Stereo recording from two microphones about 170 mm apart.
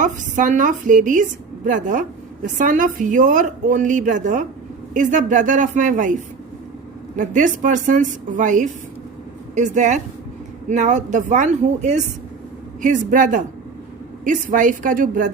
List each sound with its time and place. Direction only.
0.0 s a woman's voice: 45° right (ahead or behind)
7.2 s a woman's voice: 50° right (ahead or behind)